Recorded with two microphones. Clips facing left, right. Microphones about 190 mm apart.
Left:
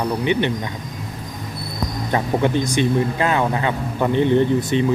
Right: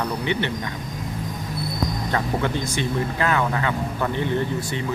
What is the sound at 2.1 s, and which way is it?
Speech, 20° left (ahead or behind).